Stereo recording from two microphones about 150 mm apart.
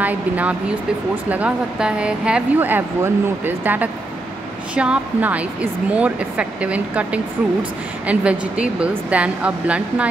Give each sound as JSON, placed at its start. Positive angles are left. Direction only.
{"t": 0.0, "sound": "a woman's voice", "side_deg": -10}